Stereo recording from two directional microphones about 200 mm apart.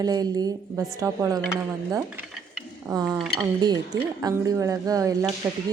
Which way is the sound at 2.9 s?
20° right (ahead or behind).